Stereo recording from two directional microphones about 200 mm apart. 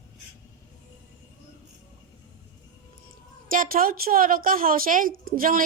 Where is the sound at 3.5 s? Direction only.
45° right (ahead or behind).